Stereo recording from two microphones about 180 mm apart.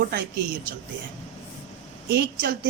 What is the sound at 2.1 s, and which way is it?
Speech, 60° right (ahead or behind).